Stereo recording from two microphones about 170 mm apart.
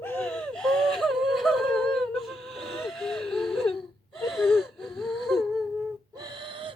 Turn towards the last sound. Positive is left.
turn(degrees=-30)  # may be behind; listen again after turning